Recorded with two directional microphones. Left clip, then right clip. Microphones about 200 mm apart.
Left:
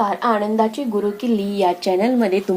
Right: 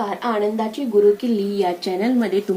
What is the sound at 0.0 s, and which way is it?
A woman's voice, 35° left (ahead or behind).